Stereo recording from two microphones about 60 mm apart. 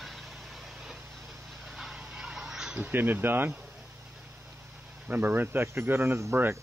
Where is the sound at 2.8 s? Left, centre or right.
Right.